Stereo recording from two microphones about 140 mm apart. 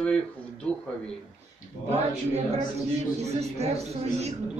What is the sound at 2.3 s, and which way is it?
Speech, 50° right (ahead or behind).